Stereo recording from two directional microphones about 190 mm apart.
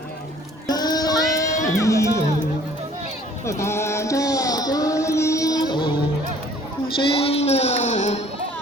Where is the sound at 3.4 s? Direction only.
15° left (ahead or behind).